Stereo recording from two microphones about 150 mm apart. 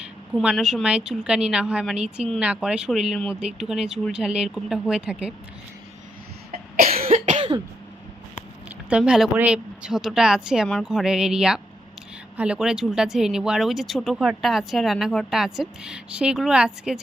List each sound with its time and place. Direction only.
0.0 s speech: 5° right (ahead or behind)
7.0 s cough: 60° right (ahead or behind)
7.3 s cough: 35° right (ahead or behind)
8.9 s speech: 5° right (ahead or behind)